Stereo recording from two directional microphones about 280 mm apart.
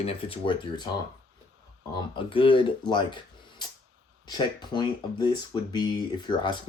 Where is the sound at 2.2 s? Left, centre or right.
Centre.